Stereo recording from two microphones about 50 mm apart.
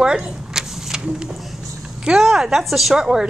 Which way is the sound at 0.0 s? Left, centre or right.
Centre.